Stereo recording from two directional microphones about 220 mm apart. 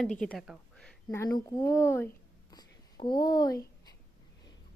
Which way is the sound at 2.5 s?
20° left (ahead or behind).